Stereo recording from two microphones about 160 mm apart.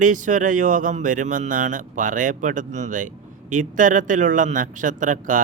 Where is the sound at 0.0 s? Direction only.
50° right (ahead or behind).